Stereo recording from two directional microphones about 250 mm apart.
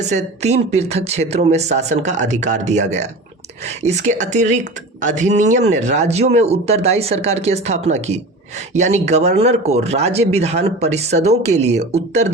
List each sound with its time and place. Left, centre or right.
0.0 s speech: right